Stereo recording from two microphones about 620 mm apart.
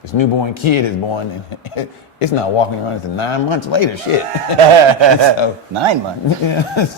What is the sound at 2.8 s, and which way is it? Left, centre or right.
A man's voice, left.